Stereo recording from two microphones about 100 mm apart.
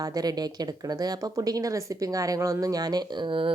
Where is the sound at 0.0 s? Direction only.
40° right (ahead or behind).